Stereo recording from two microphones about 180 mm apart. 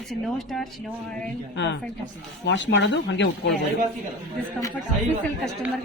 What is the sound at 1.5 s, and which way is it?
Speech, 75° left (ahead or behind).